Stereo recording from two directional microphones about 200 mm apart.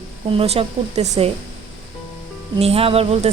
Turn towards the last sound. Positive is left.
turn(degrees=-30)  # may be behind; listen again after turning